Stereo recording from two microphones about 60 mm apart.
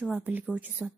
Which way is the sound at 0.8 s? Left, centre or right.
Centre.